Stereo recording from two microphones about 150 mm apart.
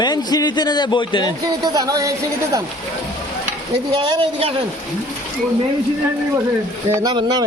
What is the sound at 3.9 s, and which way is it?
Speech, 35° right (ahead or behind).